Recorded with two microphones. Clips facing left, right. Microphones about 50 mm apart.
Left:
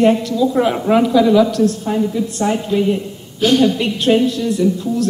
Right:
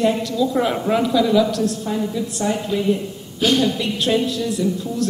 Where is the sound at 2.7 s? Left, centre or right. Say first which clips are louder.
Left 3 dB; centre.